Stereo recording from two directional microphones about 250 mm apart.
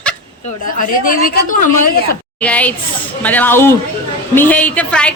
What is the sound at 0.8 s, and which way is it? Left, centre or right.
Speech, left.